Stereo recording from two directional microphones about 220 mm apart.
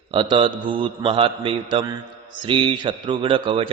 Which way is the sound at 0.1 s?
20° right (ahead or behind).